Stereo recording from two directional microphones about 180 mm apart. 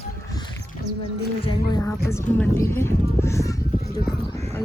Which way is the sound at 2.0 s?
15° left (ahead or behind).